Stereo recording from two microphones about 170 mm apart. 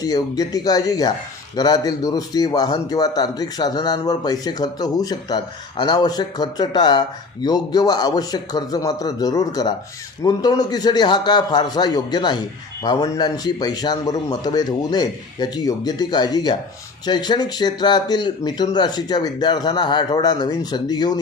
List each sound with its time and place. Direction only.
0.0 s a man's voice: 20° left (ahead or behind)